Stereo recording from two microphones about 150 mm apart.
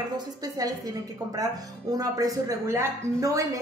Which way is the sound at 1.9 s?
25° right (ahead or behind).